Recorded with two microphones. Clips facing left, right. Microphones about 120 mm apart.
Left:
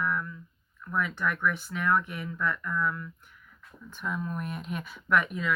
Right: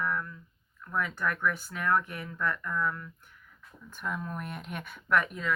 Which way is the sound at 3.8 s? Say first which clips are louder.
Left 2 dB; 50° right (ahead or behind).